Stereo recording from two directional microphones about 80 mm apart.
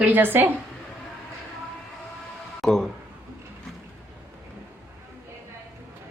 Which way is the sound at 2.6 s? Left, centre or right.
Centre.